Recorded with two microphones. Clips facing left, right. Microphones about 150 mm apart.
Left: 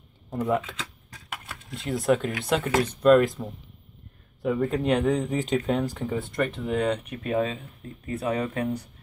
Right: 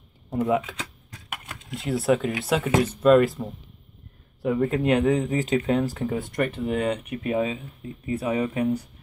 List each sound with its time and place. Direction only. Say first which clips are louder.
0.3 s speech: right 2 dB; 5° right (ahead or behind)
1.3 s a sound: right 2 dB; 15° right (ahead or behind)
1.8 s speech: right 1 dB; 5° right (ahead or behind)